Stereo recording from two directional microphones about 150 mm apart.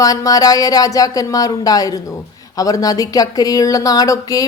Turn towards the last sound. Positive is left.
turn(degrees=25)  # may be behind; listen again after turning